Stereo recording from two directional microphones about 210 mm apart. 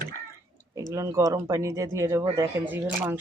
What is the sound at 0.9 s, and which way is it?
Speech, 15° right (ahead or behind).